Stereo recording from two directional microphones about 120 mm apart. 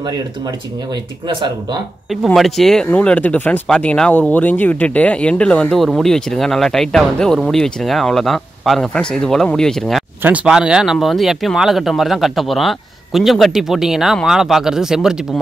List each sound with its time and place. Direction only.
1.2 s speech: 40° right (ahead or behind)
2.0 s speech: centre (ahead or behind)
10.2 s speech: 10° right (ahead or behind)